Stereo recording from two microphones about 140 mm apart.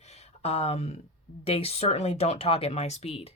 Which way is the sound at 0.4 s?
45° left (ahead or behind).